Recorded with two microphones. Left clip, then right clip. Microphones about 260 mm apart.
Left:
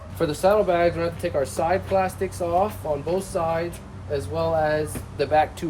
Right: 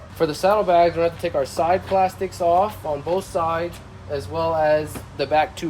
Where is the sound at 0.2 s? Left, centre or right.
Right.